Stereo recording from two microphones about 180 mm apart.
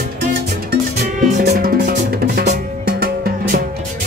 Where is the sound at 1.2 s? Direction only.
40° right (ahead or behind).